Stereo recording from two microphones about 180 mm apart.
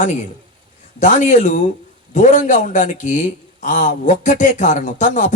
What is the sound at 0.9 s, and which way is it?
Speech, 45° left (ahead or behind).